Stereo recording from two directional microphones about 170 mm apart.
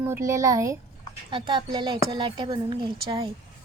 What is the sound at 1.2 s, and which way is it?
Speech, 30° right (ahead or behind).